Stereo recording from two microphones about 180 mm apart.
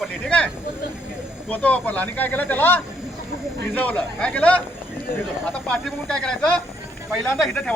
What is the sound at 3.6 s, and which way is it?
Speech, 10° left (ahead or behind).